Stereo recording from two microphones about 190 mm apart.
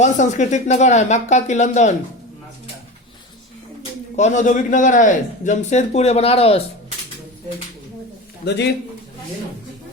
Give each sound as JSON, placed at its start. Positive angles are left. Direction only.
{"t": 0.0, "sound": "a man's voice", "side_deg": 40}
{"t": 4.2, "sound": "a man's voice", "side_deg": 40}
{"t": 8.4, "sound": "a man's voice", "side_deg": 60}